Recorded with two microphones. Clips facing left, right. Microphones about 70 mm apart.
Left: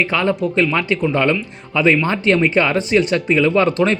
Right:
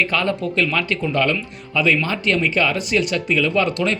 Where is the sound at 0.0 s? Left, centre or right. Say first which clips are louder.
Left 3 dB; centre.